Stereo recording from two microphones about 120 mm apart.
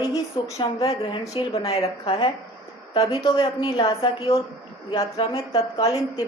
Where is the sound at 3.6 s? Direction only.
45° left (ahead or behind).